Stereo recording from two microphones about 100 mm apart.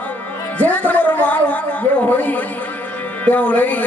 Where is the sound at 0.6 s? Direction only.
15° left (ahead or behind).